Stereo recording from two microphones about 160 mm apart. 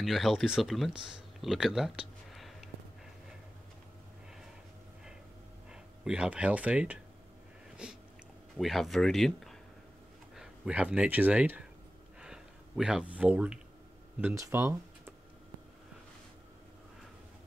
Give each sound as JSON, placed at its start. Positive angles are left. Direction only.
{"t": 0.0, "sound": "speech", "side_deg": 0}
{"t": 5.7, "sound": "speech", "side_deg": -5}
{"t": 7.8, "sound": "a sound", "side_deg": -5}
{"t": 8.5, "sound": "speech", "side_deg": 0}
{"t": 12.2, "sound": "a sound", "side_deg": -5}
{"t": 14.2, "sound": "speech", "side_deg": -15}